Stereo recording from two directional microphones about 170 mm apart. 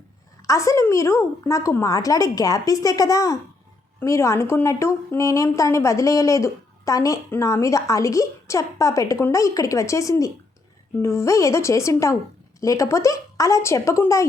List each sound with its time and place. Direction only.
0.4 s a woman's voice: 20° left (ahead or behind)